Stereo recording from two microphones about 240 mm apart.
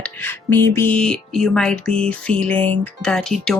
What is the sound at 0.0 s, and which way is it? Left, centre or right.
Speech, centre.